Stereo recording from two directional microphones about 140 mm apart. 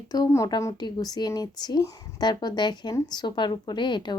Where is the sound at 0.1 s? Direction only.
25° left (ahead or behind).